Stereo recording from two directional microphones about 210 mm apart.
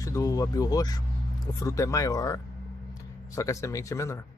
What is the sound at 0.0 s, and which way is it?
Speech, 15° left (ahead or behind).